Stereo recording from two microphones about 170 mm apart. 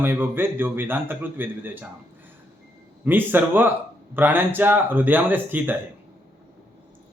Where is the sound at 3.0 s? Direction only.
10° right (ahead or behind).